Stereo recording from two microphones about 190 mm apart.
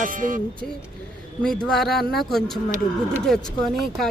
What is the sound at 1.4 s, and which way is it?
Speech, 5° left (ahead or behind).